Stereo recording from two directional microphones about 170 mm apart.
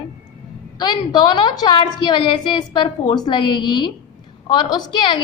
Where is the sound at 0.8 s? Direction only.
25° left (ahead or behind).